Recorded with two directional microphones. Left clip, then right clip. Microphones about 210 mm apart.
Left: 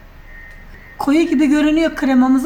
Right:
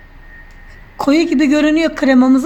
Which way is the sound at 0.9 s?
35° right (ahead or behind).